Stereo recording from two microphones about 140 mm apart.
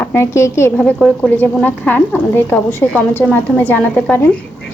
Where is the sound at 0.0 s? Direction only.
15° left (ahead or behind).